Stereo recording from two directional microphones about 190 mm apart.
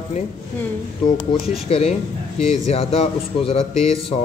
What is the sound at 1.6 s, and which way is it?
A man's voice, 30° left (ahead or behind).